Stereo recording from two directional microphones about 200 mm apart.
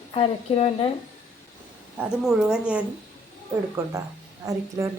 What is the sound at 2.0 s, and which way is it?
Speech, 5° right (ahead or behind).